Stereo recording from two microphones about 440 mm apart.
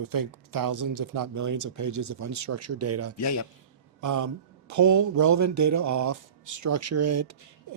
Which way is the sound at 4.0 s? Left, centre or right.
Right.